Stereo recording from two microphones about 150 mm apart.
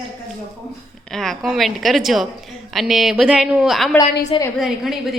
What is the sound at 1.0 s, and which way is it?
A woman's voice, 5° left (ahead or behind).